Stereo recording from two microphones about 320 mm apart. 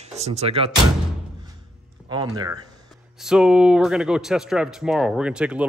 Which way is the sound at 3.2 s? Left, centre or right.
Centre.